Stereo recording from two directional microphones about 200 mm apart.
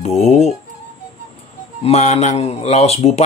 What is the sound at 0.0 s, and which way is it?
Music, 30° left (ahead or behind).